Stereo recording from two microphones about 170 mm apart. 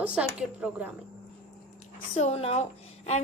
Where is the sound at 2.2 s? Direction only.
40° left (ahead or behind).